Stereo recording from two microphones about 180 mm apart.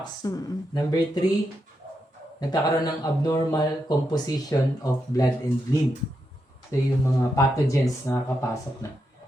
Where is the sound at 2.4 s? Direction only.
20° left (ahead or behind).